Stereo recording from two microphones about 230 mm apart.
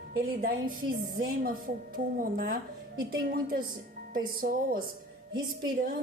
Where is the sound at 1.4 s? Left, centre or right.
Right.